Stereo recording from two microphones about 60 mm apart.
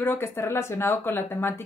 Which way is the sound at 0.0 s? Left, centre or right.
Left.